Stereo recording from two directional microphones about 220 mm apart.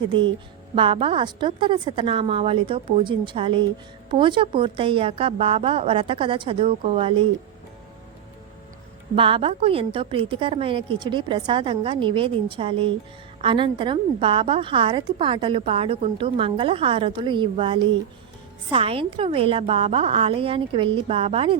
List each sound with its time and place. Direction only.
0.1 s a woman's voice: 20° right (ahead or behind)
9.1 s a woman's voice: 25° right (ahead or behind)